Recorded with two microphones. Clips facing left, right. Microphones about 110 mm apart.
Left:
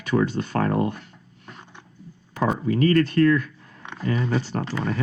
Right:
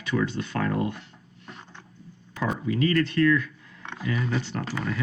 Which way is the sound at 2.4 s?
40° left (ahead or behind).